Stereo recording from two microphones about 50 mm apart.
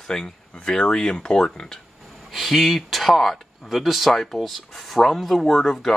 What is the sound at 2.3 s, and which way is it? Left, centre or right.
Speech, centre.